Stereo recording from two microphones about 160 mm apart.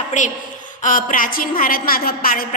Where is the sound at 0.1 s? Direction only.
50° left (ahead or behind).